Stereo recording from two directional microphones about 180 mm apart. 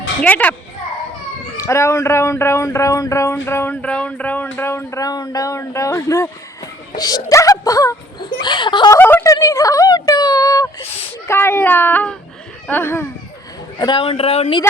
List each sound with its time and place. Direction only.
0.2 s speech: 10° left (ahead or behind)
1.5 s speech: 15° left (ahead or behind)
4.5 s a sound: 10° left (ahead or behind)
8.4 s speech: 25° left (ahead or behind)
9.0 s a sound: 10° left (ahead or behind)
11.3 s speech: 15° left (ahead or behind)
13.7 s speech: 25° left (ahead or behind)